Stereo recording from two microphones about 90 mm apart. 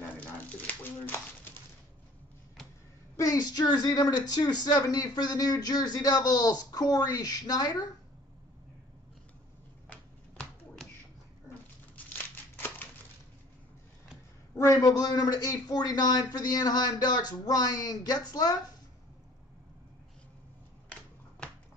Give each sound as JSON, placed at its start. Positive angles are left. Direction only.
{"t": 0.2, "sound": "dog", "side_deg": 15}
{"t": 3.2, "sound": "speech", "side_deg": 40}
{"t": 11.9, "sound": "crumpling", "side_deg": 20}
{"t": 14.6, "sound": "speech", "side_deg": 35}